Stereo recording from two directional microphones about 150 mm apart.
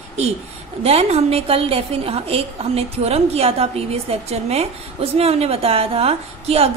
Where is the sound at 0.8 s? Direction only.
45° right (ahead or behind).